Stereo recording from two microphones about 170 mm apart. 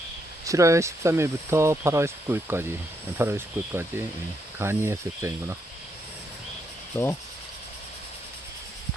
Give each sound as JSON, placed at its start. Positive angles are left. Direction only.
{"t": 0.4, "sound": "speech", "side_deg": -20}
{"t": 6.9, "sound": "speech", "side_deg": 15}